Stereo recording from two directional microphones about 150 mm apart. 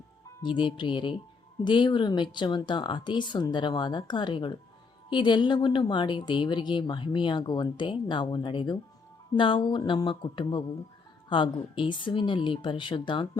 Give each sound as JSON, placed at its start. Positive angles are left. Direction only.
{"t": 0.4, "sound": "speech", "side_deg": 30}
{"t": 11.7, "sound": "speech", "side_deg": 30}